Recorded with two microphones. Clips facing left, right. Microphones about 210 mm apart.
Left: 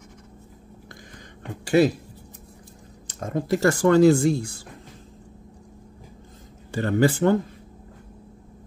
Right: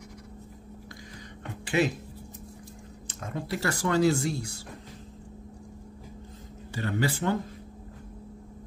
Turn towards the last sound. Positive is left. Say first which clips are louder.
# left 8 dB
turn(degrees=50)  # may be behind; listen again after turning